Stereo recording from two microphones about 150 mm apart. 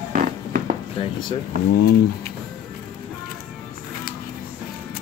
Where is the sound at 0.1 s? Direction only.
65° right (ahead or behind).